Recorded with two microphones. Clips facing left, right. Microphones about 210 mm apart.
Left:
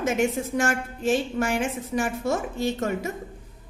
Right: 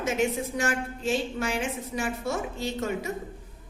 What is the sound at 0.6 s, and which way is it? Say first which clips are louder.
A woman's voice: left 4 dB; 45° left (ahead or behind).